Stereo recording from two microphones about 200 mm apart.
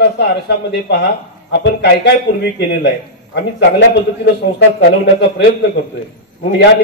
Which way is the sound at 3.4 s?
55° left (ahead or behind).